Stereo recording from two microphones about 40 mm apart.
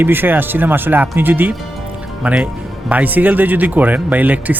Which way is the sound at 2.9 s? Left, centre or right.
Right.